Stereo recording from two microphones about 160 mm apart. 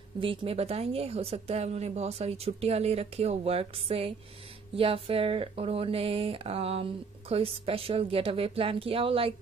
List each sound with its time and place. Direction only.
0.2 s speech: 35° right (ahead or behind)